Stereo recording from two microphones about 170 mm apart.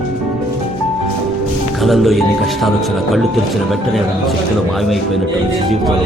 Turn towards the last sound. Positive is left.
turn(degrees=0)  # may be behind; listen again after turning